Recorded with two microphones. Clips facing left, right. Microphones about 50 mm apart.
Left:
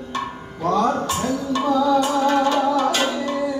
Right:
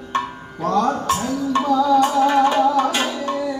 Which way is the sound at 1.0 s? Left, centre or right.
Right.